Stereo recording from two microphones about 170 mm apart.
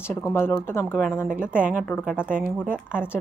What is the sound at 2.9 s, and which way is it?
Speech, 10° left (ahead or behind).